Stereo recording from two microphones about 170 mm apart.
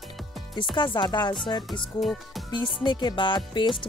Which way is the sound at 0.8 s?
25° left (ahead or behind).